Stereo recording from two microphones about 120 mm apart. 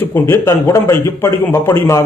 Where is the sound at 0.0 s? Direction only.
20° left (ahead or behind).